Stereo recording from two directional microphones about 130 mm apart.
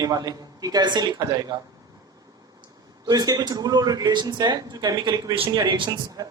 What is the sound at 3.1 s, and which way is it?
A man's voice, 30° right (ahead or behind).